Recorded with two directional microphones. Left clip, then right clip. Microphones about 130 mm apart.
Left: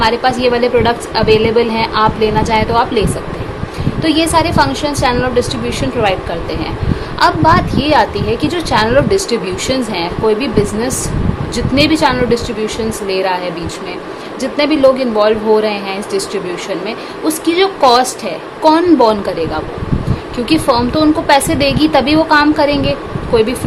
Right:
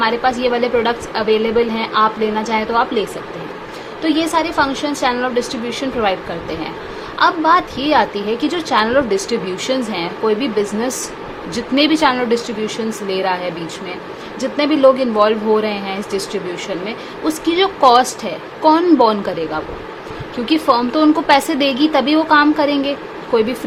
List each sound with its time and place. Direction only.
0.0 s a woman's voice: 15° right (ahead or behind)
7.2 s a woman's voice: 15° right (ahead or behind)
14.5 s a woman's voice: 20° right (ahead or behind)
20.9 s a woman's voice: 30° right (ahead or behind)